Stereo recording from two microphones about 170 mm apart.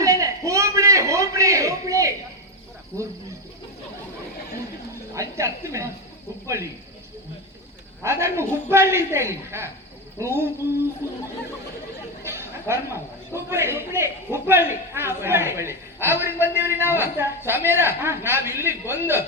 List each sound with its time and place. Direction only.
0.0 s a sound: 20° right (ahead or behind)
5.1 s a man's voice: 20° right (ahead or behind)
8.0 s a man's voice: 15° right (ahead or behind)
12.2 s a man's voice: 15° right (ahead or behind)